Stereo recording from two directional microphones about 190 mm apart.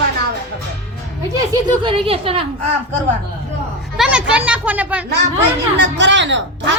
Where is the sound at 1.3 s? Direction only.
25° right (ahead or behind).